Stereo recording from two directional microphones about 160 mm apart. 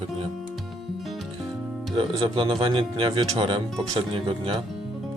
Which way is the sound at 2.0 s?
35° right (ahead or behind).